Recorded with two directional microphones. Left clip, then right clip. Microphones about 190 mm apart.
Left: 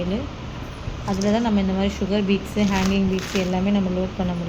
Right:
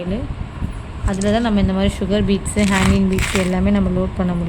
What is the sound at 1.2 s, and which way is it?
Speech, 20° right (ahead or behind).